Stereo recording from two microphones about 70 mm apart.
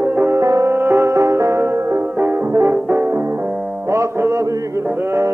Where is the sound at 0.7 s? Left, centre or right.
Right.